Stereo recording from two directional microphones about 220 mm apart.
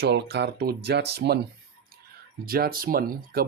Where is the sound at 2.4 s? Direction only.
40° right (ahead or behind).